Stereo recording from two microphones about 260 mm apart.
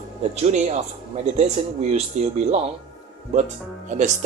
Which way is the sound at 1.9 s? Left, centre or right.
Right.